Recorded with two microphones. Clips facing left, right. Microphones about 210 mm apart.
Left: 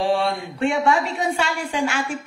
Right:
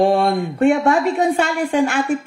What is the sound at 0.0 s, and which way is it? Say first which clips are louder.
Speech: right 6 dB; 50° right (ahead or behind).